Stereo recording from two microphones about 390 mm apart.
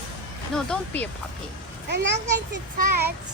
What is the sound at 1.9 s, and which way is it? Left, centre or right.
Speech, right.